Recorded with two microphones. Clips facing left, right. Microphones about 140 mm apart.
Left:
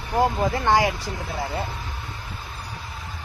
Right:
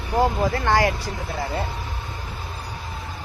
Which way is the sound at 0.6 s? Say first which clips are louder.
Even; 15° left (ahead or behind).